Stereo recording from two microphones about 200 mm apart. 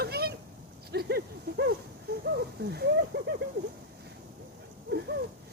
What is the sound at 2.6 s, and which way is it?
Speech, 55° right (ahead or behind).